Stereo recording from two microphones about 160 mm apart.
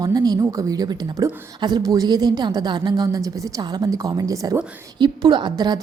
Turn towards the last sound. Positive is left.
turn(degrees=-25)  # may be behind; listen again after turning